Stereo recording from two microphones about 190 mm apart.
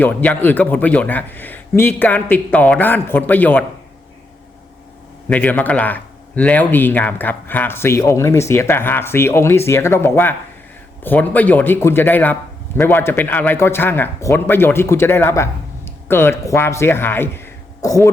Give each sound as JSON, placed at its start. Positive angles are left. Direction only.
{"t": 0.0, "sound": "speech", "side_deg": 10}
{"t": 5.3, "sound": "speech", "side_deg": 10}